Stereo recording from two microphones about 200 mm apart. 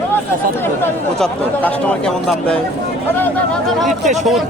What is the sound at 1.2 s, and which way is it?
A man's voice, 5° left (ahead or behind).